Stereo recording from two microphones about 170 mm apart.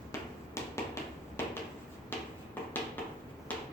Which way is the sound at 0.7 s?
15° left (ahead or behind).